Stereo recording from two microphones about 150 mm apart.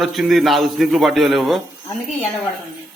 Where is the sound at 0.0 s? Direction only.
Centre (ahead or behind).